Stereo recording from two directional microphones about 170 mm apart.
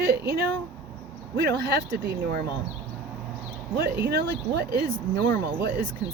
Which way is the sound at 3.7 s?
70° right (ahead or behind).